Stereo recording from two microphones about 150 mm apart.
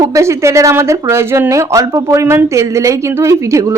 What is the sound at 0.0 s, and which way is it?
A woman's voice, 20° right (ahead or behind).